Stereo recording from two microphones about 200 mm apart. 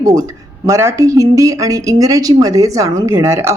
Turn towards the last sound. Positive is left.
turn(degrees=-15)  # may be behind; listen again after turning